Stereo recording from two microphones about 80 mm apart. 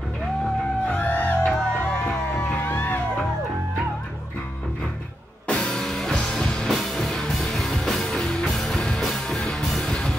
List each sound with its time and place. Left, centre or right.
0.8 s music: centre
5.5 s music: centre